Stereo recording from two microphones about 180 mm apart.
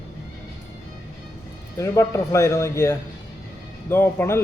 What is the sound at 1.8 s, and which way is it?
Speech, 15° left (ahead or behind).